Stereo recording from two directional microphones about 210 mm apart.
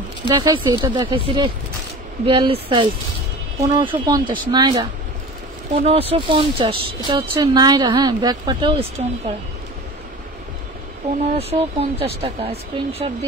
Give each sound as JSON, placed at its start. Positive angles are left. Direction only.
{"t": 0.2, "sound": "speech", "side_deg": -20}
{"t": 5.9, "sound": "speech", "side_deg": -30}
{"t": 11.3, "sound": "speech", "side_deg": -30}